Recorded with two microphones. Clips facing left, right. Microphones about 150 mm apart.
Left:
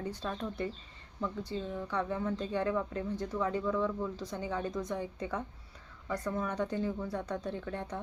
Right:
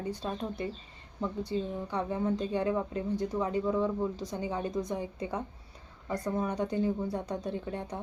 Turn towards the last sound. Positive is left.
turn(degrees=-15)  # may be behind; listen again after turning